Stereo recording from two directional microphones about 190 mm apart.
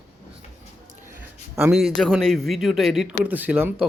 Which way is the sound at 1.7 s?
Centre (ahead or behind).